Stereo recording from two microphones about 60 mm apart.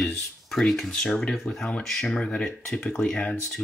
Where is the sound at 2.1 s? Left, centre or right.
Centre.